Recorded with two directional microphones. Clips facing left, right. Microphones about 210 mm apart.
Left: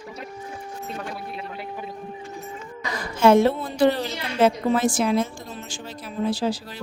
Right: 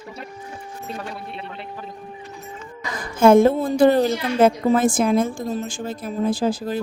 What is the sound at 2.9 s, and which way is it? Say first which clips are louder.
Speech: right 3 dB; 50° right (ahead or behind).